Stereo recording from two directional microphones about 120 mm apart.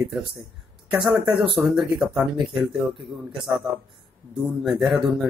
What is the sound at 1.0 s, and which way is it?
Speech, 40° right (ahead or behind).